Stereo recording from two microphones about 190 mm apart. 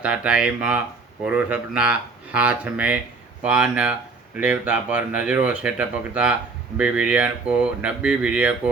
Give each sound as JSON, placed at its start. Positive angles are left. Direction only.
{"t": 0.0, "sound": "speech", "side_deg": -5}